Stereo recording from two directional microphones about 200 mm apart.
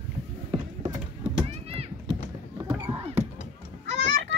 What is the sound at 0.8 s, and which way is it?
Run, 10° right (ahead or behind).